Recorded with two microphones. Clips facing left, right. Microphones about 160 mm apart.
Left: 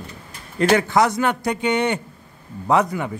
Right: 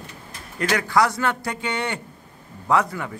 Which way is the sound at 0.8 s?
20° left (ahead or behind).